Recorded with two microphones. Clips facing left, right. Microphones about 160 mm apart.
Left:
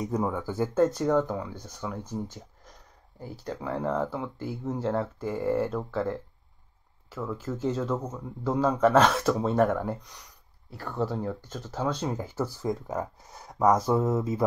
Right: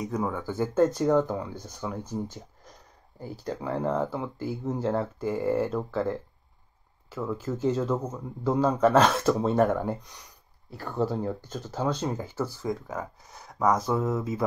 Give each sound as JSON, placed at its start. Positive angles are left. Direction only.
{"t": 0.2, "sound": "speech", "side_deg": 5}
{"t": 13.6, "sound": "a sound", "side_deg": 10}
{"t": 13.9, "sound": "mantra", "side_deg": 25}